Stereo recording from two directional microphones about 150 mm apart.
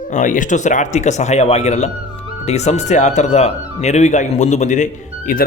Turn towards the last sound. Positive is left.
turn(degrees=60)  # may be behind; listen again after turning